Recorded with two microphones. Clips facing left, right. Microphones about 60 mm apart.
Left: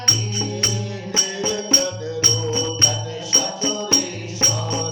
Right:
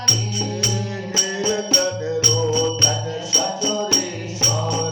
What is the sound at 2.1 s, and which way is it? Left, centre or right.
Music, left.